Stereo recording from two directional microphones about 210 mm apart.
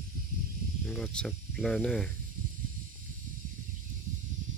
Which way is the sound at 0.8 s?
5° left (ahead or behind).